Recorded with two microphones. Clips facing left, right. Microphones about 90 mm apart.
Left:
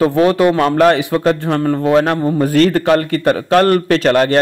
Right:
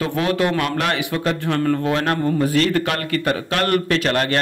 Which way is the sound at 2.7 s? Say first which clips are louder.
Left 8 dB; 35° left (ahead or behind).